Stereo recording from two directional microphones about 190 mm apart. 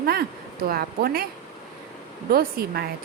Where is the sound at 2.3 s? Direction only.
55° right (ahead or behind).